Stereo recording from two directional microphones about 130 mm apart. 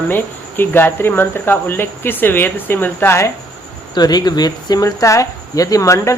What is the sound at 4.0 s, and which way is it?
Speech, 30° left (ahead or behind).